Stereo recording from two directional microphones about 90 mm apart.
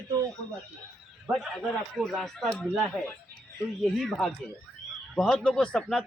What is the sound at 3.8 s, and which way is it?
Speech, centre (ahead or behind).